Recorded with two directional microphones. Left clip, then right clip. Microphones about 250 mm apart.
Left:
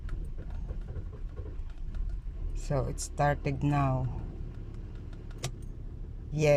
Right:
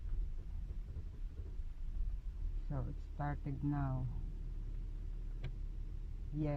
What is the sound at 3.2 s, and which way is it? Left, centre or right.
Speech, left.